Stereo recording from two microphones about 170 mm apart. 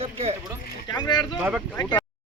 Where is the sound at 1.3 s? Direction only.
10° right (ahead or behind).